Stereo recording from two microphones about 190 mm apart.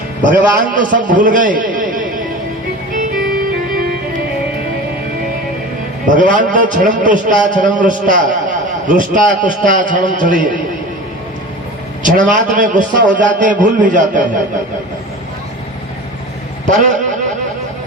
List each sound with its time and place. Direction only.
0.2 s a man's voice: 45° right (ahead or behind)
6.1 s a man's voice: 45° right (ahead or behind)
12.0 s a man's voice: 45° right (ahead or behind)
16.6 s a man's voice: 40° right (ahead or behind)